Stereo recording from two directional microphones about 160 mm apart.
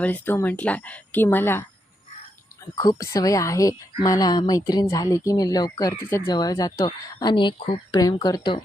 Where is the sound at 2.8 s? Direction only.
20° left (ahead or behind).